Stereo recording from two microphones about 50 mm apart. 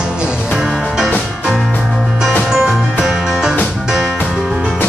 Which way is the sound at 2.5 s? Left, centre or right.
Centre.